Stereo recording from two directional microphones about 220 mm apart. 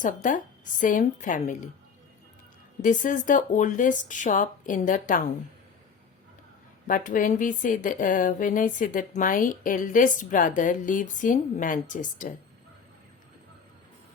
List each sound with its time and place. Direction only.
0.0 s speech: 35° left (ahead or behind)
2.8 s speech: 35° left (ahead or behind)
6.8 s speech: 40° left (ahead or behind)